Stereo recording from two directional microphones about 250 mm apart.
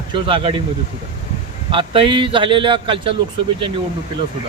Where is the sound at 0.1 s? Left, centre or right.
Right.